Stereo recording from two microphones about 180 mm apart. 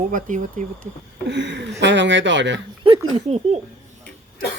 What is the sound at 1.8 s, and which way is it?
Speech, 80° right.